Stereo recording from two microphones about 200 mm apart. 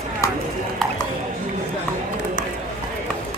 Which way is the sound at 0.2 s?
15° left (ahead or behind).